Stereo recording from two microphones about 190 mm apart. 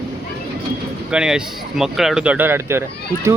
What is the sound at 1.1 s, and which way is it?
Speech, 5° right (ahead or behind).